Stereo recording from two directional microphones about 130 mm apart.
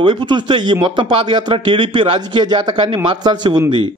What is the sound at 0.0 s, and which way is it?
A man's voice, 40° right (ahead or behind).